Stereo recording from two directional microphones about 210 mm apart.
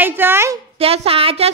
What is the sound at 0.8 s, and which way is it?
Speech, 30° right (ahead or behind).